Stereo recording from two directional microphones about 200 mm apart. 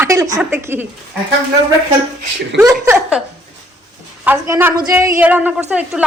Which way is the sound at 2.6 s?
15° right (ahead or behind).